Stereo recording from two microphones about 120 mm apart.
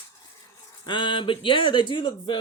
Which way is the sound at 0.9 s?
45° left (ahead or behind).